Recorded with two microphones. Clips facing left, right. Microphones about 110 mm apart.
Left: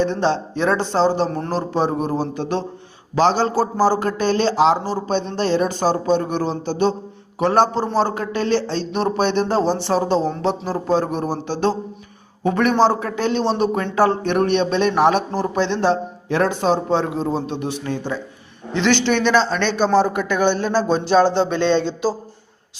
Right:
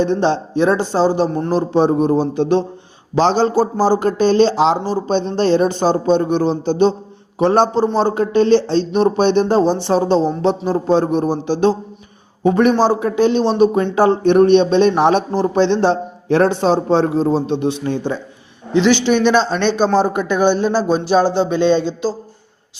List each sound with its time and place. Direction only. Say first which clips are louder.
0.0 s a man's voice: right 3 dB; 20° right (ahead or behind)